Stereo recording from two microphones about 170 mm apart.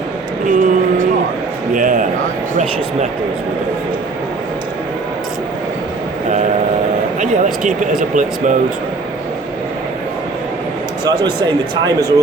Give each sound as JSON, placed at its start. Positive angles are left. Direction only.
{"t": 0.4, "sound": "vehicle", "side_deg": -50}
{"t": 1.7, "sound": "a man's voice", "side_deg": -50}
{"t": 6.2, "sound": "a sound", "side_deg": -45}
{"t": 7.2, "sound": "speech", "side_deg": -50}
{"t": 11.0, "sound": "a man's voice", "side_deg": -25}